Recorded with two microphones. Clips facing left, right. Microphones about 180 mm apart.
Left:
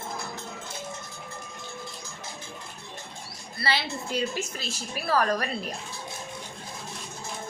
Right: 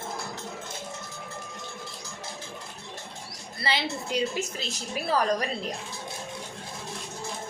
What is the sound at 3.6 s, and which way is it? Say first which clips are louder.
A woman's voice: even; 15° right (ahead or behind).